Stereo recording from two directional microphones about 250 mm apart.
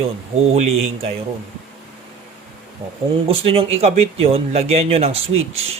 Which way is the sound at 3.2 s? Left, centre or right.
Right.